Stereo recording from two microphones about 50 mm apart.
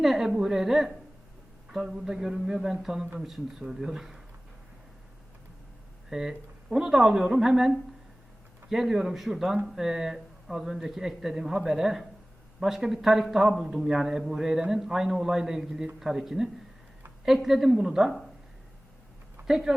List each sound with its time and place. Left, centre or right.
0.0 s a sound: centre
0.3 s speech: centre
6.1 s speech: centre
19.5 s speech: centre